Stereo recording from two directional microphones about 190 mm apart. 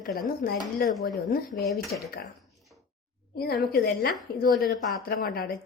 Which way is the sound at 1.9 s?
45° left (ahead or behind).